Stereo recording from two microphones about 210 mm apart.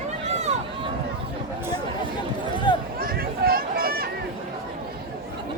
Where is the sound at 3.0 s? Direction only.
45° right (ahead or behind).